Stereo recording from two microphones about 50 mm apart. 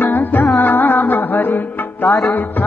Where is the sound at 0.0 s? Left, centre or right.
Left.